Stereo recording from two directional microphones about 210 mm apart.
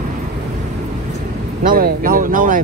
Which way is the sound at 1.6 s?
40° right (ahead or behind).